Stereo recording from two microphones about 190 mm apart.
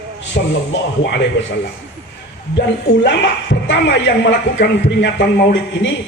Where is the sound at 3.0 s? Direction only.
70° left (ahead or behind).